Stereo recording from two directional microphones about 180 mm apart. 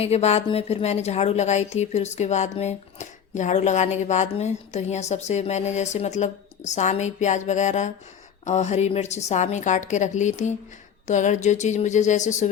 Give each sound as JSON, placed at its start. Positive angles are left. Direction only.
{"t": 0.0, "sound": "a woman's voice", "side_deg": 35}